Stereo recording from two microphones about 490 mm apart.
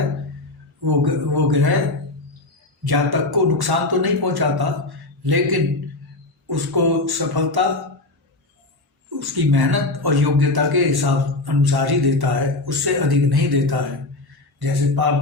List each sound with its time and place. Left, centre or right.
0.9 s speech: right
2.8 s speech: right
9.0 s speech: right